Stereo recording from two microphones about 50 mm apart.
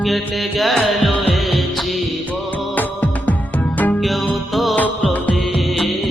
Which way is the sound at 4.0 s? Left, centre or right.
Centre.